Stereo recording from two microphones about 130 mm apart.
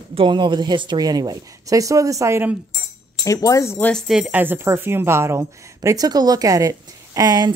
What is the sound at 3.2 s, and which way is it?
Speech, 25° left (ahead or behind).